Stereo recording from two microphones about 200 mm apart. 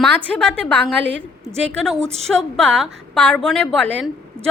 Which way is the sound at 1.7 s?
Centre (ahead or behind).